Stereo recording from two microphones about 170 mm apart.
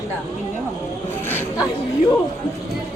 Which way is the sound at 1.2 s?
10° left (ahead or behind).